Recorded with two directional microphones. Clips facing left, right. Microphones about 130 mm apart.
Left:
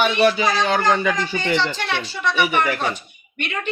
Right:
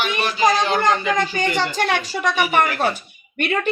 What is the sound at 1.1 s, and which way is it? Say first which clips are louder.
A woman's voice: right 1 dB; 45° right (ahead or behind).